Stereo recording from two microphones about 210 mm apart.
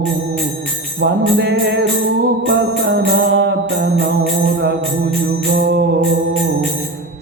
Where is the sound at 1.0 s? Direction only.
55° right (ahead or behind).